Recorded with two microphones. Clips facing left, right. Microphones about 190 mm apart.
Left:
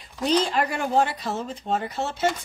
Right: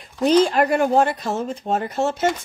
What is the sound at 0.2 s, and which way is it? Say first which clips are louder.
Speech: right 6 dB; 55° right (ahead or behind).